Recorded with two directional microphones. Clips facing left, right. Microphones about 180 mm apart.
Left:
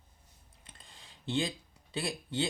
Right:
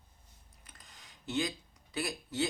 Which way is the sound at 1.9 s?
30° left (ahead or behind).